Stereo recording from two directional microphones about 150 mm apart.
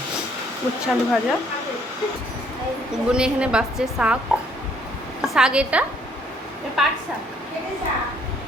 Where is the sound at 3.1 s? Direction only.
5° right (ahead or behind).